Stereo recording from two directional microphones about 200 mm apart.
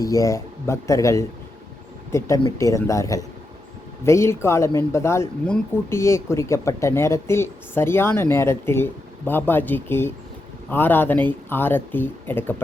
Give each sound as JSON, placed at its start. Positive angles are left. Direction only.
{"t": 0.0, "sound": "speech", "side_deg": 15}